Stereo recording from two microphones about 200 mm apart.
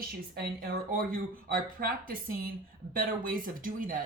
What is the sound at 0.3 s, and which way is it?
Speech, 50° right (ahead or behind).